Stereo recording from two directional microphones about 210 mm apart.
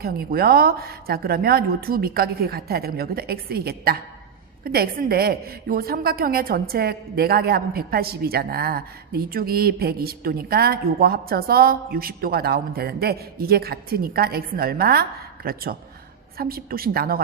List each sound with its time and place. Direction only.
0.0 s a woman's voice: 45° right (ahead or behind)